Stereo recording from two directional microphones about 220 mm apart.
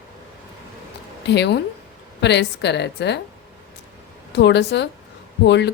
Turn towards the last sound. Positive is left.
turn(degrees=50)  # may be behind; listen again after turning